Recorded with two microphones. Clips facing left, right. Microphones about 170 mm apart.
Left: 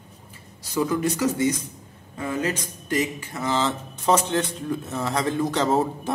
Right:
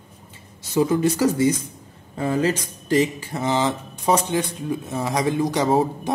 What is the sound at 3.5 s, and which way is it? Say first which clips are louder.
A man's voice: right 2 dB; 15° right (ahead or behind).